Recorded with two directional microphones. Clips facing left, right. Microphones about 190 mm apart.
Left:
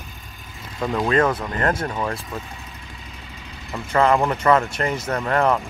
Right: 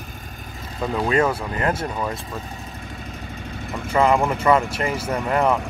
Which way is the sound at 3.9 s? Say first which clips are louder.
Even; 5° right (ahead or behind).